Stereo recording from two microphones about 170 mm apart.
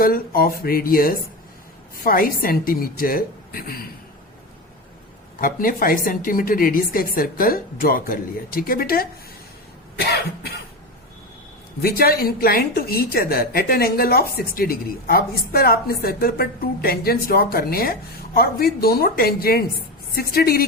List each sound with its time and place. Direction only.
0.0 s a woman's voice: 60° left (ahead or behind)
5.4 s a woman's voice: 55° left (ahead or behind)
11.8 s a woman's voice: 60° left (ahead or behind)